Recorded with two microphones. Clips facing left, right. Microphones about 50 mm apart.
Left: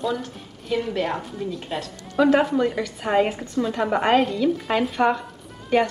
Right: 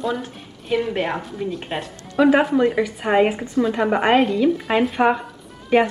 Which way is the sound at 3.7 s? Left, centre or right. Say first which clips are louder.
Right 1 dB; centre.